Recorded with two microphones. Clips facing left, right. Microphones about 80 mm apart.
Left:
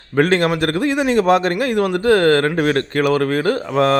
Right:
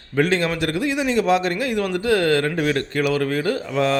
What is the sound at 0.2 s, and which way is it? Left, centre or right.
A man's voice, left.